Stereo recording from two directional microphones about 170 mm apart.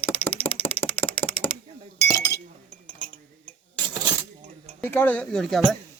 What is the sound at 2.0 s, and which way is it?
Chink, 20° left (ahead or behind).